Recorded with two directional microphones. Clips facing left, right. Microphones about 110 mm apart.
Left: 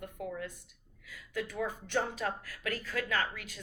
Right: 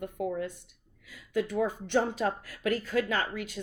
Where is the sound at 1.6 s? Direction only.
25° right (ahead or behind).